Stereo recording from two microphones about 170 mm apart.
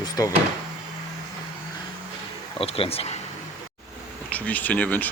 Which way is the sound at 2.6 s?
35° left (ahead or behind).